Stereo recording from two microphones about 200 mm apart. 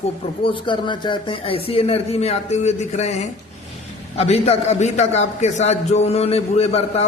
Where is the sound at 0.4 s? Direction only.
25° left (ahead or behind).